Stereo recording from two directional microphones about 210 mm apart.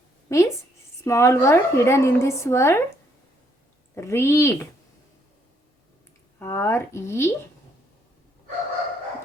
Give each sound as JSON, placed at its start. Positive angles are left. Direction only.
{"t": 0.3, "sound": "a woman's voice", "side_deg": 15}
{"t": 3.9, "sound": "a woman's voice", "side_deg": 10}
{"t": 6.4, "sound": "a woman's voice", "side_deg": 10}